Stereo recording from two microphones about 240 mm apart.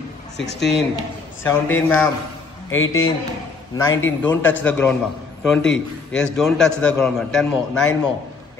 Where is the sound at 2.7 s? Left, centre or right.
Left.